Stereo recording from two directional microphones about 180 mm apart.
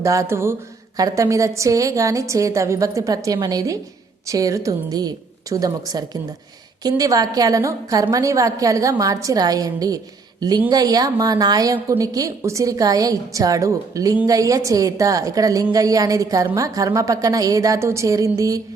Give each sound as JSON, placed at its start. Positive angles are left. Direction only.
{"t": 0.0, "sound": "a woman's voice", "side_deg": -15}